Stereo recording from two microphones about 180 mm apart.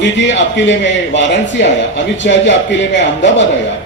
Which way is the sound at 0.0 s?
90° left.